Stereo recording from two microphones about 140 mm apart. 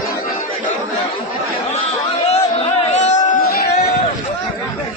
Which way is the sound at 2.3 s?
50° left (ahead or behind).